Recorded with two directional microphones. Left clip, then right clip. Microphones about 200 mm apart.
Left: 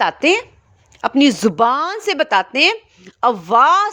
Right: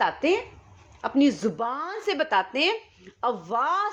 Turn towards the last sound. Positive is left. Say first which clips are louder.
# left 13 dB
turn(degrees=40)  # may be behind; listen again after turning